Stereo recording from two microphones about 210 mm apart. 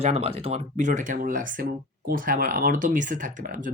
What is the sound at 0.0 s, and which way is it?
Speech, 30° right (ahead or behind).